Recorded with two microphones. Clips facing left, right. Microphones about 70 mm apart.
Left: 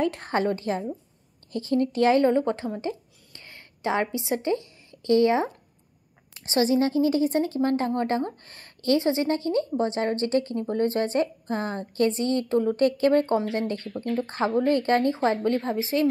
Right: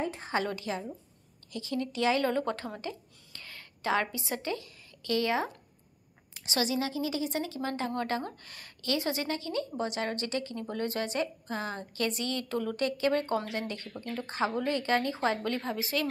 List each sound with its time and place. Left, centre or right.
0.0 s a woman's voice: left
0.3 s speech: left
2.2 s a woman's voice: left
2.8 s a sound: left
6.4 s a woman's voice: left